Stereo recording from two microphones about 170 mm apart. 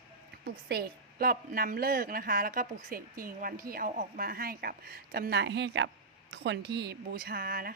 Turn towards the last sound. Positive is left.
turn(degrees=-55)  # may be behind; listen again after turning